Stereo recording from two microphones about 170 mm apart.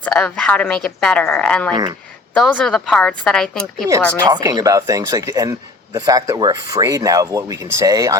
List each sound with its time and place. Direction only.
0.0 s a woman's voice: 5° left (ahead or behind)
4.3 s speech: 25° right (ahead or behind)